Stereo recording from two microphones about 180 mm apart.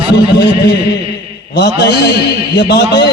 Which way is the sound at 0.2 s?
60° left (ahead or behind).